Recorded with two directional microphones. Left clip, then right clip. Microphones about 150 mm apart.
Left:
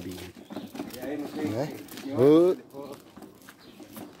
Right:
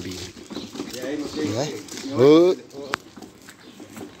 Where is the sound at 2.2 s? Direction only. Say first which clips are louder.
Right 5 dB; 10° left (ahead or behind).